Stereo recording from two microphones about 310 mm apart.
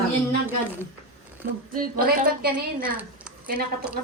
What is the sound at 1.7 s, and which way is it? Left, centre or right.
Speech, right.